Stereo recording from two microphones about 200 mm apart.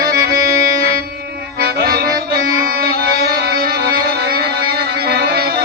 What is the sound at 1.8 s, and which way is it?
Music, 50° right (ahead or behind).